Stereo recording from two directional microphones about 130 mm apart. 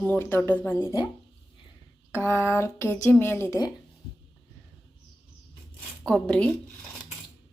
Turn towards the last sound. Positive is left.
turn(degrees=10)  # may be behind; listen again after turning